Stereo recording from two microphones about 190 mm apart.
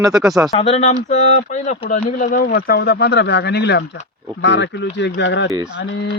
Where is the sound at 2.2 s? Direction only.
50° left (ahead or behind).